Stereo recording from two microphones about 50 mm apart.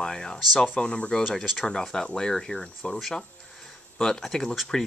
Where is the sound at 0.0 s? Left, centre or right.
Centre.